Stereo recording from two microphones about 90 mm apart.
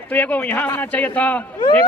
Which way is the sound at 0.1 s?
15° left (ahead or behind).